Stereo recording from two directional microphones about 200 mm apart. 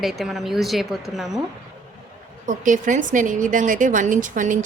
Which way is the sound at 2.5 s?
40° right (ahead or behind).